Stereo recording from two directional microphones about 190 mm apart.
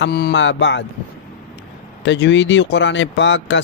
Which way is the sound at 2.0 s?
70° left (ahead or behind).